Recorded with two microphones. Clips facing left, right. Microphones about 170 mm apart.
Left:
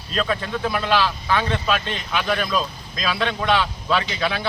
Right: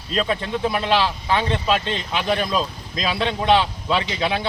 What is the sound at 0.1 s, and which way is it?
Speech, 25° right (ahead or behind).